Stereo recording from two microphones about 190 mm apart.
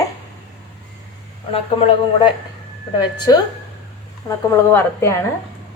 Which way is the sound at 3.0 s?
20° left (ahead or behind).